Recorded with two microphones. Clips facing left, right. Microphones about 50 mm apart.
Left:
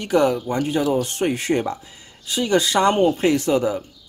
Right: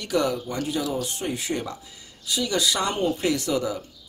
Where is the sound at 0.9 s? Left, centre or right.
Left.